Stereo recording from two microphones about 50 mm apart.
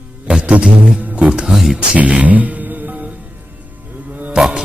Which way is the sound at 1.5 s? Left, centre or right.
Centre.